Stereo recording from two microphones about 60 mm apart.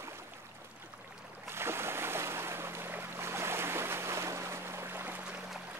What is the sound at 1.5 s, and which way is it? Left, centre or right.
Boat, right.